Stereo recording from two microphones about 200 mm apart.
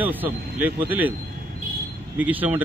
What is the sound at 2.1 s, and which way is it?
Speech, 10° right (ahead or behind).